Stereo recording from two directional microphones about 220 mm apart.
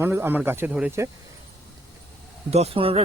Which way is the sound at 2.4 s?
30° right (ahead or behind).